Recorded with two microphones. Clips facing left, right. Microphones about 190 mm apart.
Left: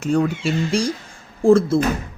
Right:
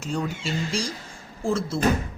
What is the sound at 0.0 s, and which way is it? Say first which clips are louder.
Speech: left 9 dB; 60° left (ahead or behind).